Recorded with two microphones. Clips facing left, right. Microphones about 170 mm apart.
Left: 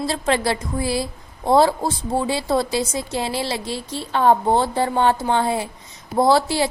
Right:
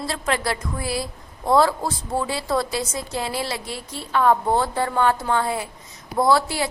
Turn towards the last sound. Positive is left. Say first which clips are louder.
# left 3 dB
turn(degrees=30)  # may be behind; listen again after turning